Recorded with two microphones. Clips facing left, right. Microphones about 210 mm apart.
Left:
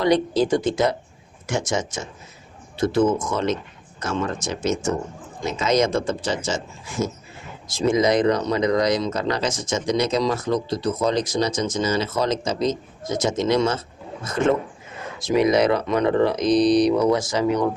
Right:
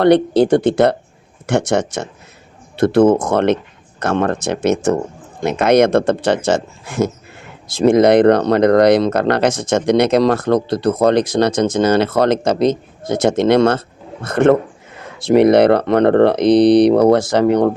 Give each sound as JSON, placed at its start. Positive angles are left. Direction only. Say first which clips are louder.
{"t": 0.0, "sound": "speech", "louder": "right 7 dB", "side_deg": -65}